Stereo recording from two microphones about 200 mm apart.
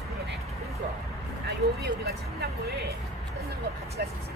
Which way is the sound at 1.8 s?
50° right (ahead or behind).